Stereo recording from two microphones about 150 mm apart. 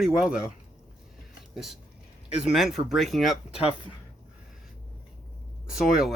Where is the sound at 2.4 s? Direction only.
Centre (ahead or behind).